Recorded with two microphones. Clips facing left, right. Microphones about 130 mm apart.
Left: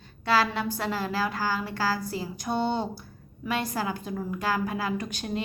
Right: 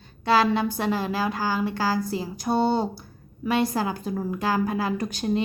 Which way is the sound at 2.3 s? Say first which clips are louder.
Right 5 dB; 35° right (ahead or behind).